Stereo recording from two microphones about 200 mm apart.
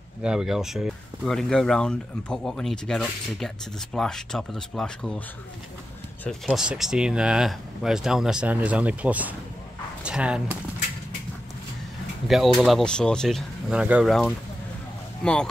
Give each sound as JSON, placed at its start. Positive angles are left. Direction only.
{"t": 0.2, "sound": "speech", "side_deg": -5}
{"t": 6.2, "sound": "speech", "side_deg": 0}
{"t": 12.3, "sound": "speech", "side_deg": 0}